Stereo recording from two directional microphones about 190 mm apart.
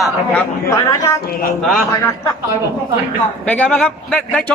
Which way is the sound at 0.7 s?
15° left (ahead or behind).